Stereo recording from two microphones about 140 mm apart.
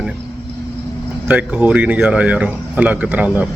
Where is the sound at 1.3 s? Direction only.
10° right (ahead or behind).